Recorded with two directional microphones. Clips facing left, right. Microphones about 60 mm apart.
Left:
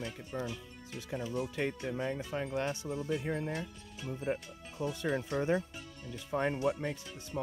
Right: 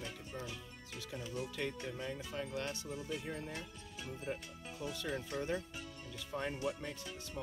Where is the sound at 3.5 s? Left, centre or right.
Centre.